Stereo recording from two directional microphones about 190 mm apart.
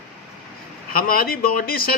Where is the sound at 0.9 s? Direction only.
50° left (ahead or behind).